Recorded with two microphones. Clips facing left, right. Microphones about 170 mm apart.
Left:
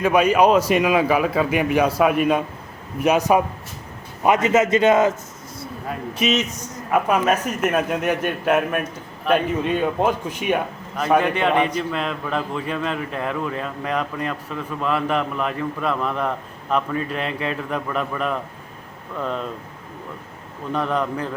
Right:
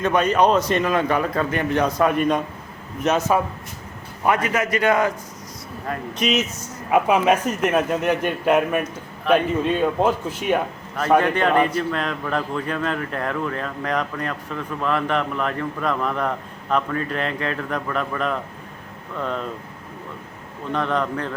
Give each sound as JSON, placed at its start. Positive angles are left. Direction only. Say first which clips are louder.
{"t": 0.0, "sound": "a man's voice", "louder": "left 2 dB", "side_deg": 10}
{"t": 5.9, "sound": "speech", "louder": "left 1 dB", "side_deg": 5}
{"t": 6.9, "sound": "speech", "louder": "right 2 dB", "side_deg": -10}
{"t": 7.4, "sound": "a man's voice", "louder": "right 1 dB", "side_deg": 10}
{"t": 20.7, "sound": "a man's voice", "louder": "even", "side_deg": 10}